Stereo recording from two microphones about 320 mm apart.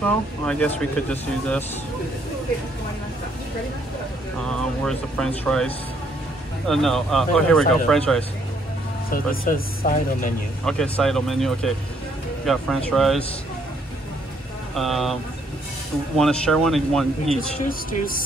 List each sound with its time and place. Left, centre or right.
0.0 s speech: centre
4.5 s speech: centre
6.7 s speech: centre
9.1 s speech: left
10.6 s speech: centre
14.8 s speech: centre
16.2 s speech: centre
17.6 s speech: left